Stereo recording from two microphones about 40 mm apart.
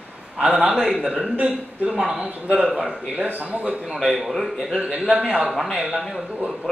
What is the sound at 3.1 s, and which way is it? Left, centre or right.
Speech, right.